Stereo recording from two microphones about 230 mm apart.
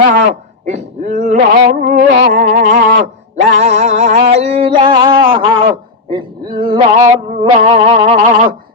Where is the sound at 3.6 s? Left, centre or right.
Right.